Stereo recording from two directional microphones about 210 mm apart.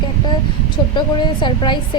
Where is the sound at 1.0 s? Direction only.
20° left (ahead or behind).